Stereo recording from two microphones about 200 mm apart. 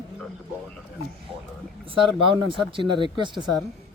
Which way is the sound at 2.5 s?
25° right (ahead or behind).